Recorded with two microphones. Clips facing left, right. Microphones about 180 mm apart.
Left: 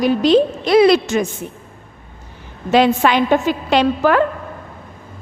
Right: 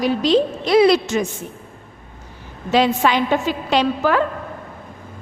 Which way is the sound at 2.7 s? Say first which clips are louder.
Left 3 dB; 60° left (ahead or behind).